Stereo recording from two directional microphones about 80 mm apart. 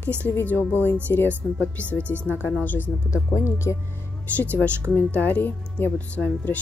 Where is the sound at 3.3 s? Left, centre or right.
Left.